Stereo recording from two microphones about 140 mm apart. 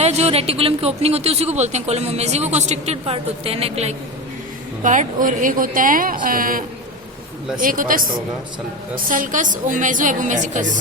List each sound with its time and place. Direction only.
0.0 s speech: 50° right (ahead or behind)
4.8 s a woman's voice: 65° right (ahead or behind); by 6.7 s 90° right
7.6 s speech: 80° right
9.0 s a woman's voice: 70° right (ahead or behind)